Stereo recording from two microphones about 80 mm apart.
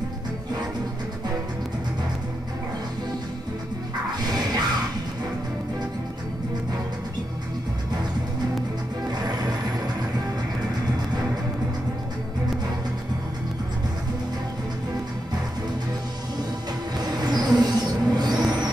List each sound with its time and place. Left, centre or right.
4.3 s music: right
9.1 s music: right
17.0 s a sound: right